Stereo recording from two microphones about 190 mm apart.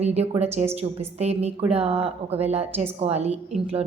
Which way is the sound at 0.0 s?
35° right (ahead or behind).